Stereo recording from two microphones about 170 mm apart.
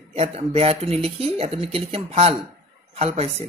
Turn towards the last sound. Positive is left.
turn(degrees=-35)  # may be behind; listen again after turning